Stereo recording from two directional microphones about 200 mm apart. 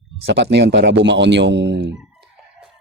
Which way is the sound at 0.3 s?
60° right (ahead or behind).